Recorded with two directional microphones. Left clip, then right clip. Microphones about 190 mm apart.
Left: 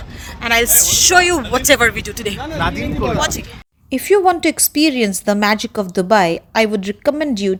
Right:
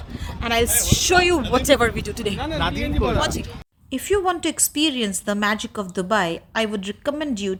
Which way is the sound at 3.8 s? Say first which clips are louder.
Left 8 dB; 20° left (ahead or behind).